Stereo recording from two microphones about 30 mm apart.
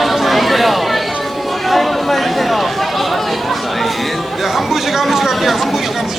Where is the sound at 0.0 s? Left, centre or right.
Centre.